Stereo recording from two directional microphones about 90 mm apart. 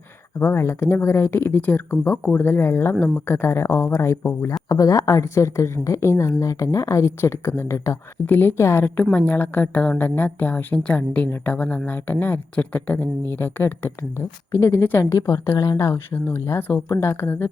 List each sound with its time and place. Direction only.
0.3 s a woman's voice: 30° left (ahead or behind)
9.0 s a woman's voice: 15° left (ahead or behind)
15.5 s speech: 45° left (ahead or behind)
15.8 s speech: 25° left (ahead or behind)